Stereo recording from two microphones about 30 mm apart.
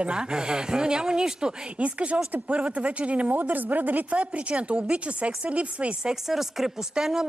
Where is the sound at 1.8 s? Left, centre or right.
Right.